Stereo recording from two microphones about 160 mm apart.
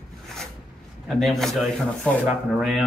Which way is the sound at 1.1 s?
Centre (ahead or behind).